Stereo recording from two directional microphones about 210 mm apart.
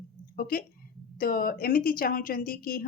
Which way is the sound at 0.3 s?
45° left (ahead or behind).